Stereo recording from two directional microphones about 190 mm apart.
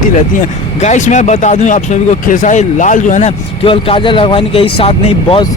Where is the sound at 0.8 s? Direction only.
40° left (ahead or behind).